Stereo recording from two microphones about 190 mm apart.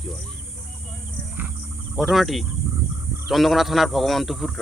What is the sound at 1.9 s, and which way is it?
Speech, centre (ahead or behind).